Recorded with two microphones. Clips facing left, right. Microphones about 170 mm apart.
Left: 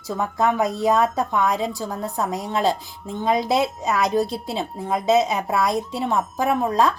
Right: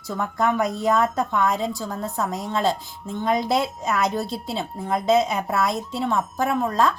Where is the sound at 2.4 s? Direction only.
15° left (ahead or behind).